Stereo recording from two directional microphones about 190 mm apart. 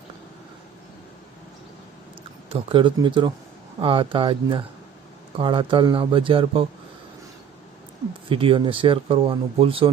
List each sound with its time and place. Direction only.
2.5 s speech: 30° right (ahead or behind)
8.3 s speech: 25° right (ahead or behind)